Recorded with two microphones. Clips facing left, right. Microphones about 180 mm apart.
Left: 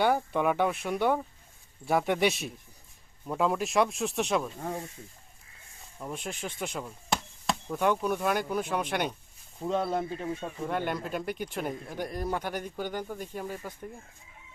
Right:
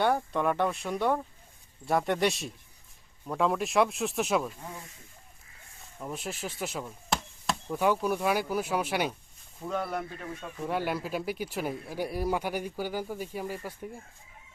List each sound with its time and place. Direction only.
0.0 s speech: 5° left (ahead or behind)
6.0 s chop: centre (ahead or behind)
9.6 s speech: 25° left (ahead or behind)
10.6 s speech: 5° right (ahead or behind)